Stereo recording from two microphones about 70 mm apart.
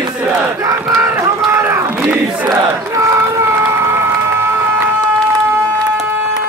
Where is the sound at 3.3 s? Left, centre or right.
Right.